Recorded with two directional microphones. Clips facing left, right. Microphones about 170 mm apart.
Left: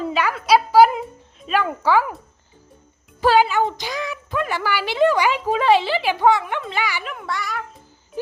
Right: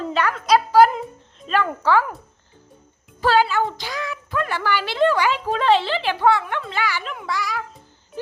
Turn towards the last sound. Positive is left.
turn(degrees=0)  # may be behind; listen again after turning